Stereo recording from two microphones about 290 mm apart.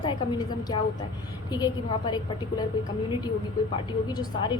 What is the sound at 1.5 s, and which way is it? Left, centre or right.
A woman's voice, centre.